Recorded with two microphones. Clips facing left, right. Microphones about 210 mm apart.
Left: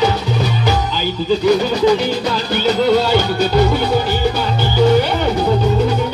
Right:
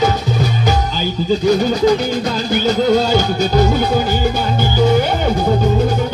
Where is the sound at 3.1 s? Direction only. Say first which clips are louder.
Even; 45° right (ahead or behind).